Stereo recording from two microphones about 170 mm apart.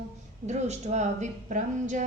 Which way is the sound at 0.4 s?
40° right (ahead or behind).